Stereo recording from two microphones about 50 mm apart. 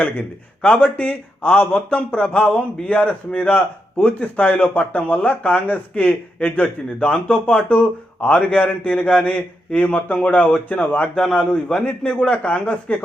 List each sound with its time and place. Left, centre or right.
0.0 s speech: left
11.1 s speech: centre